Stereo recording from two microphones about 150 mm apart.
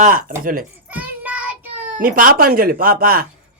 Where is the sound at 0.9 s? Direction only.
10° right (ahead or behind).